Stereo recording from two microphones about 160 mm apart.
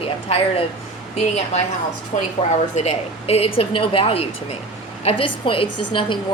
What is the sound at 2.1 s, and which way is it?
Speech, 55° left (ahead or behind).